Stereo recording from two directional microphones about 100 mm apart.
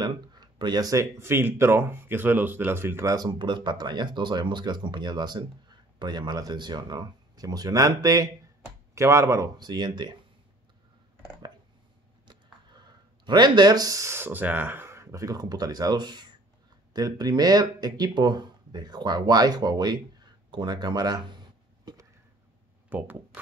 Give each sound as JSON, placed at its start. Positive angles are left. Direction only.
{"t": 0.0, "sound": "speech", "side_deg": -45}
{"t": 3.2, "sound": "speech", "side_deg": -50}
{"t": 12.3, "sound": "speech", "side_deg": -50}
{"t": 22.8, "sound": "speech", "side_deg": -15}